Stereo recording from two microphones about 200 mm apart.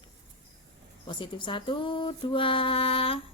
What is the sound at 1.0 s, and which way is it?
A woman's voice, 25° left (ahead or behind).